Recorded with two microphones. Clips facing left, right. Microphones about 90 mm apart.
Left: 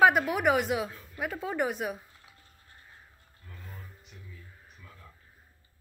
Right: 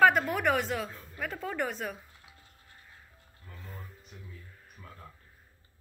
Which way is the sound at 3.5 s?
Centre (ahead or behind).